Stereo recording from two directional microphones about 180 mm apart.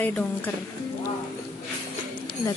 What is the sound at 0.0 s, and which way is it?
Speech, 5° left (ahead or behind).